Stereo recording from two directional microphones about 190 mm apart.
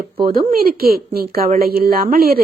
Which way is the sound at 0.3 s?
50° right (ahead or behind).